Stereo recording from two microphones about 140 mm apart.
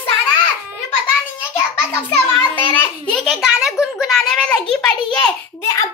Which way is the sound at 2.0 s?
10° left (ahead or behind).